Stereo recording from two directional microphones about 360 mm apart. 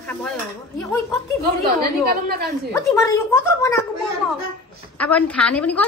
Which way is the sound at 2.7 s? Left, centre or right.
Centre.